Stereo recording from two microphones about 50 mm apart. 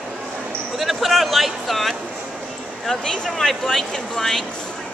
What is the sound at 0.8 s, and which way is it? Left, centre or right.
Speech, centre.